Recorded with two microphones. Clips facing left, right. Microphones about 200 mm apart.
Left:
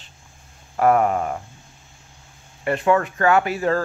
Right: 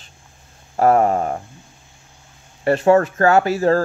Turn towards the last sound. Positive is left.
turn(degrees=-40)  # may be behind; listen again after turning